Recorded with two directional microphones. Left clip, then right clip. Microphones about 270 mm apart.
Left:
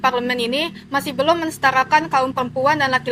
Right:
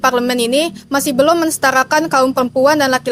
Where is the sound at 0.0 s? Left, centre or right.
Right.